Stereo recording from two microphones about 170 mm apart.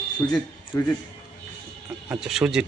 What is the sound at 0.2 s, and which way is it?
Speech, 15° left (ahead or behind).